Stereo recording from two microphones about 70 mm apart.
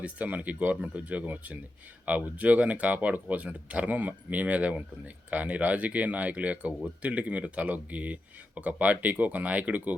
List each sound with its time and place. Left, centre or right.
0.0 s speech: right